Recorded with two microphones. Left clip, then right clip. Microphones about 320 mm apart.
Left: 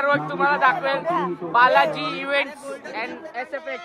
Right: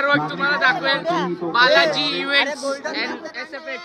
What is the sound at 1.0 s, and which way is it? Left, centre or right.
Speech, right.